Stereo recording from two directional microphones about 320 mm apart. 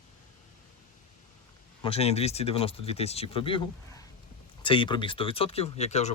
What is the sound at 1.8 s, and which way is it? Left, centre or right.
Speech, centre.